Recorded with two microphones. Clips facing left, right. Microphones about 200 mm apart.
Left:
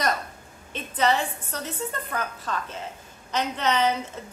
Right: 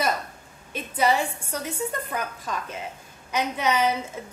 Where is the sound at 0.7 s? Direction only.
10° right (ahead or behind).